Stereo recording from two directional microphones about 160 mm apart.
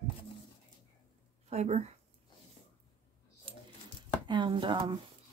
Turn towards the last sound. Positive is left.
turn(degrees=-30)  # may be behind; listen again after turning